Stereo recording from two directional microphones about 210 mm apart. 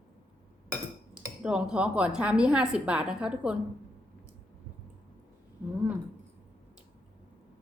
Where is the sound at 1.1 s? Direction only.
5° right (ahead or behind).